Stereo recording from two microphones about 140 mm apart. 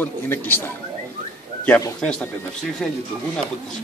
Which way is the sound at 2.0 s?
5° left (ahead or behind).